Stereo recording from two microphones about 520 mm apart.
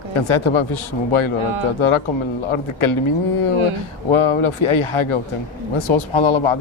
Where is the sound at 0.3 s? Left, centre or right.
Left.